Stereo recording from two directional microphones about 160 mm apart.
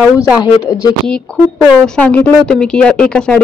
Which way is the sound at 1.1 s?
5° left (ahead or behind).